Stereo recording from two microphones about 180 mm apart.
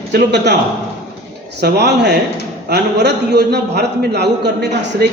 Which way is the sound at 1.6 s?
70° right (ahead or behind).